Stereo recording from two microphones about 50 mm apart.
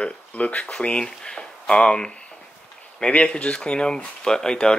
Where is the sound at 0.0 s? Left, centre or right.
Left.